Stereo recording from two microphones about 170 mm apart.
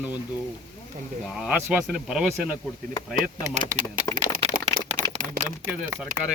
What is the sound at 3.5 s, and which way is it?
Speech, 45° right (ahead or behind).